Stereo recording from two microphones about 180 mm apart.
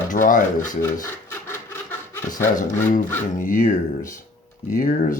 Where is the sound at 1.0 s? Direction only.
10° left (ahead or behind).